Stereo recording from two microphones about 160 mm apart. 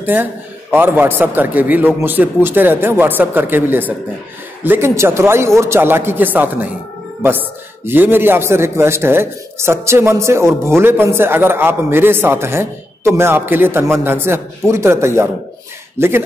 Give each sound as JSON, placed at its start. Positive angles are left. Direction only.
{"t": 0.0, "sound": "a man's voice", "side_deg": -10}